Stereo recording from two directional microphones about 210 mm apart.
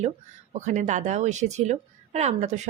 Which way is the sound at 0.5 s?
35° right (ahead or behind).